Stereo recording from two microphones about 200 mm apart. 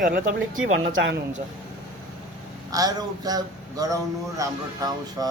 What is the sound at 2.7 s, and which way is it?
A man's voice, 20° right (ahead or behind).